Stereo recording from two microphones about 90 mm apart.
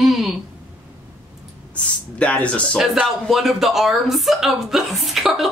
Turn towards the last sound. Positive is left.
turn(degrees=0)  # may be behind; listen again after turning